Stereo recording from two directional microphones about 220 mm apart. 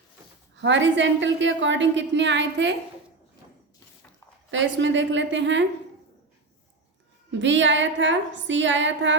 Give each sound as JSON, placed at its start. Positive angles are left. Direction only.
{"t": 0.5, "sound": "a woman's voice", "side_deg": -55}
{"t": 4.5, "sound": "a woman's voice", "side_deg": -55}
{"t": 7.3, "sound": "a woman's voice", "side_deg": -55}